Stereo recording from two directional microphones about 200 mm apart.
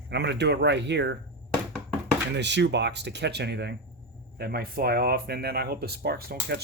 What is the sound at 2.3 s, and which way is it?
Speech, 60° right (ahead or behind).